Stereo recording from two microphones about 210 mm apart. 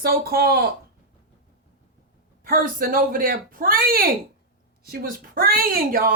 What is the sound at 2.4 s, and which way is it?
Speech, 45° right (ahead or behind).